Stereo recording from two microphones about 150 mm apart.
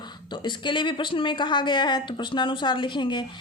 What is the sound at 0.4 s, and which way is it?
Speech, 30° left (ahead or behind).